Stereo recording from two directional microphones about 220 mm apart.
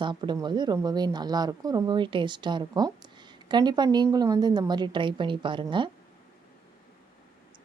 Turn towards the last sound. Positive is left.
turn(degrees=-20)  # may be behind; listen again after turning